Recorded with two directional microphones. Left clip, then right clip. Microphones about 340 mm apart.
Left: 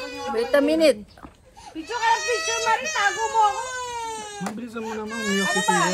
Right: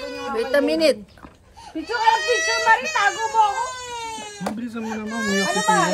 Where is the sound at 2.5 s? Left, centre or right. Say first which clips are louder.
Right 6 dB; centre.